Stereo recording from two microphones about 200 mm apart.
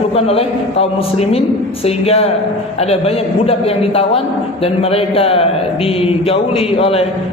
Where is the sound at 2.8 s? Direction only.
30° left (ahead or behind).